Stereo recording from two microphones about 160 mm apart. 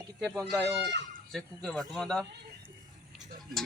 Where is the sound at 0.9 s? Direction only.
90° right.